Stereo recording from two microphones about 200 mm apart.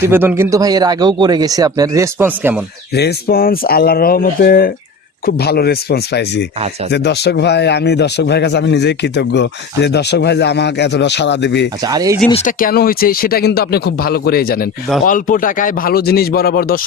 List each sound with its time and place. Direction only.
0.0 s speech: 10° right (ahead or behind)
2.9 s speech: 55° left (ahead or behind)
11.8 s speech: 20° right (ahead or behind)
12.3 s speech: 35° left (ahead or behind)